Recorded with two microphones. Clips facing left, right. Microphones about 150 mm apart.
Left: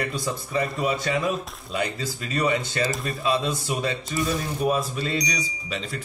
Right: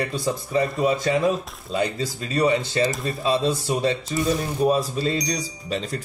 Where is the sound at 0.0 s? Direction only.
30° right (ahead or behind).